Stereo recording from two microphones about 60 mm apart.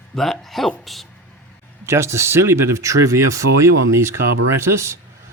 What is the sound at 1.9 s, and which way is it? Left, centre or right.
Speech, right.